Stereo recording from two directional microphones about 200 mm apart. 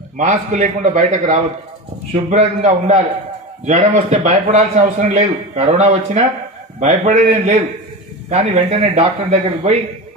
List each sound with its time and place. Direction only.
0.2 s a man's voice: 35° right (ahead or behind)